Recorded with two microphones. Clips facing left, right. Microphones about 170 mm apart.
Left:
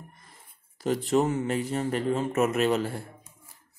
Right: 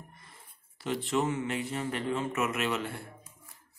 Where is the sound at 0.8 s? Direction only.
40° left (ahead or behind).